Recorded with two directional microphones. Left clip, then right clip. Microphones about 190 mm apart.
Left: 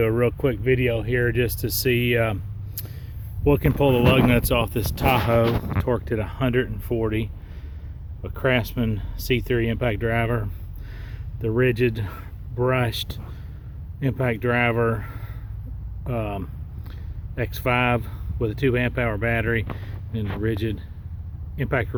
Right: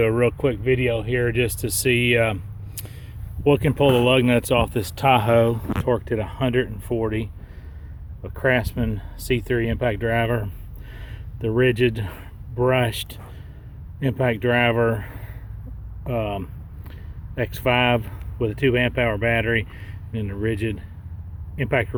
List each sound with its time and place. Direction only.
0.0 s speech: 15° right (ahead or behind)
5.8 s speech: 10° right (ahead or behind)